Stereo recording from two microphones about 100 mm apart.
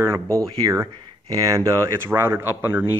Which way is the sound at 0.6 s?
35° right (ahead or behind).